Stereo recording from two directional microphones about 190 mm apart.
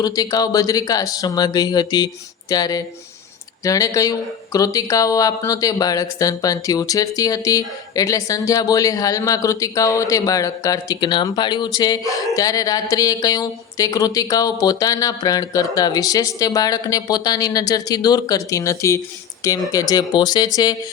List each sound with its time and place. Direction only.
0.0 s speech: 20° left (ahead or behind)